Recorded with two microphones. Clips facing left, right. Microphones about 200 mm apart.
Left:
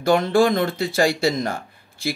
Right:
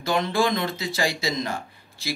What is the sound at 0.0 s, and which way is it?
Speech, 50° left (ahead or behind).